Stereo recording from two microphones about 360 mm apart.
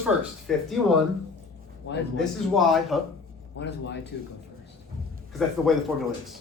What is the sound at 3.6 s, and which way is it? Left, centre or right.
Speech, left.